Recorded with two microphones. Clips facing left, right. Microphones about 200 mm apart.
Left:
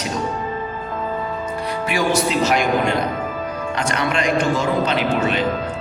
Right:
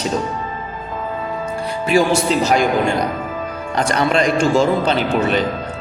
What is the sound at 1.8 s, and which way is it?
Speech, 30° right (ahead or behind).